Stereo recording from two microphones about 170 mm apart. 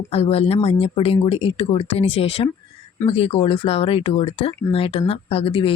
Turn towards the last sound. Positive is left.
turn(degrees=30)  # may be behind; listen again after turning